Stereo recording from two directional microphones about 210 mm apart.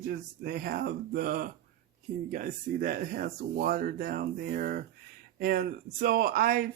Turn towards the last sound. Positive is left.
turn(degrees=-45)  # may be behind; listen again after turning